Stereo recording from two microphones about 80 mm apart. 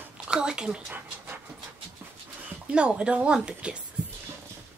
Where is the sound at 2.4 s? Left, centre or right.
Centre.